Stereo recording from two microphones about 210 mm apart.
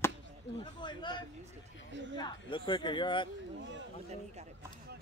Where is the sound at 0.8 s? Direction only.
20° left (ahead or behind).